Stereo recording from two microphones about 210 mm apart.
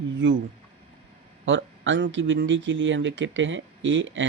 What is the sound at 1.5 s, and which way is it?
Speech, 60° right (ahead or behind).